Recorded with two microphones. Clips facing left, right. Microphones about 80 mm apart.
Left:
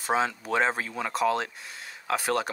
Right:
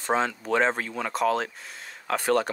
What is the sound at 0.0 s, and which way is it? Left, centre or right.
Speech, centre.